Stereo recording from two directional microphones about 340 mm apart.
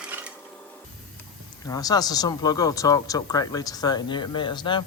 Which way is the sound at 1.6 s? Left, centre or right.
Centre.